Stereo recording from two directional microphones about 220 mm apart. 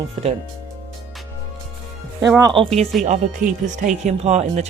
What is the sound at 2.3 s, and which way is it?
Speech, 20° right (ahead or behind).